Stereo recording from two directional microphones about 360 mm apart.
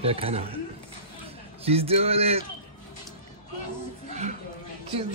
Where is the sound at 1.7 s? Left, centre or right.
Centre.